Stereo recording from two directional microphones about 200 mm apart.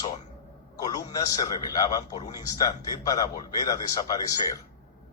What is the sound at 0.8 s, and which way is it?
A man's voice, 20° left (ahead or behind).